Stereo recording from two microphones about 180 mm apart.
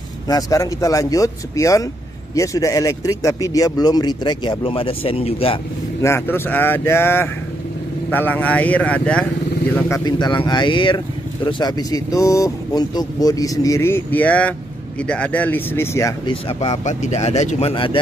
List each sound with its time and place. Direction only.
0.3 s speech: 20° left (ahead or behind)
6.0 s speech: 15° left (ahead or behind)
16.8 s speech: 40° left (ahead or behind)